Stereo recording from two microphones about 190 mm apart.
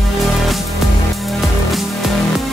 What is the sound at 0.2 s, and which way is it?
Music, centre (ahead or behind).